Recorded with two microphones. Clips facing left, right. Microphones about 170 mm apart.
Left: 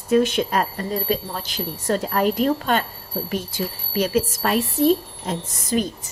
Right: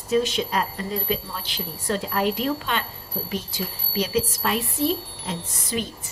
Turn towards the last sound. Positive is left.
turn(degrees=45)  # may be behind; listen again after turning